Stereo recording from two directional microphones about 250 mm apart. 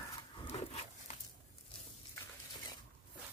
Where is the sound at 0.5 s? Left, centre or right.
Left.